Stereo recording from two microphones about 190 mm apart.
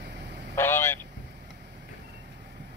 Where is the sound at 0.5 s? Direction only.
10° left (ahead or behind).